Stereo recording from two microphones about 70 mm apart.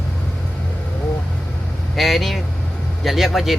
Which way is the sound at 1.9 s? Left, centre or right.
Centre.